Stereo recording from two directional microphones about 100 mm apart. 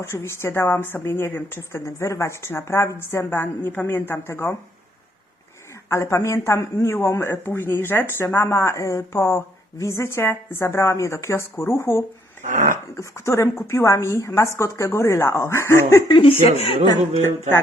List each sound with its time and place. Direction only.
0.0 s speech: 30° left (ahead or behind)
5.9 s speech: 30° left (ahead or behind)
16.2 s speech: 80° left